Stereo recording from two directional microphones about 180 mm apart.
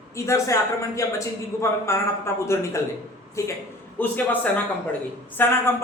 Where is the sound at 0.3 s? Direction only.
15° left (ahead or behind).